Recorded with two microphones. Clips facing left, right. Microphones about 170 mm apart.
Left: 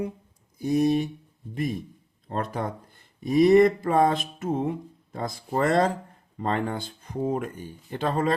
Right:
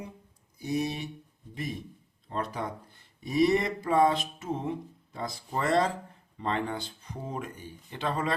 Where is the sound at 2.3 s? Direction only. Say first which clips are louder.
Left 4 dB; 50° left (ahead or behind).